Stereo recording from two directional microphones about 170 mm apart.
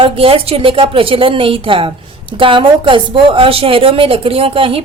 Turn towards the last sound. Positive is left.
turn(degrees=-30)  # may be behind; listen again after turning